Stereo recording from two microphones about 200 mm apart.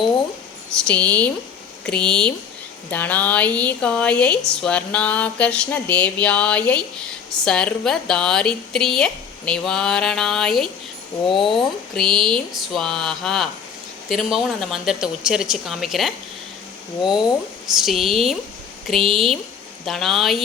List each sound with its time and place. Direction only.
0.9 s a woman's voice: 5° left (ahead or behind)
11.3 s speech: 25° left (ahead or behind)
11.5 s a woman's voice: centre (ahead or behind)
17.7 s a woman's voice: centre (ahead or behind)